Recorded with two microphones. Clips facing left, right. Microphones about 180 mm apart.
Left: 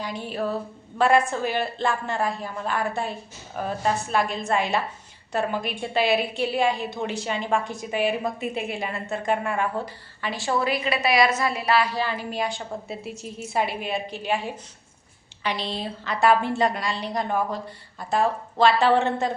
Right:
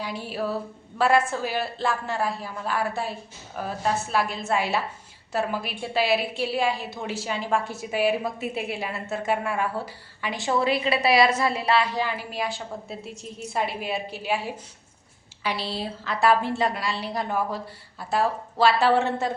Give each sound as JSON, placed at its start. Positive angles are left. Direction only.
{"t": 0.0, "sound": "a woman's voice", "side_deg": -5}
{"t": 12.3, "sound": "a woman's voice", "side_deg": -5}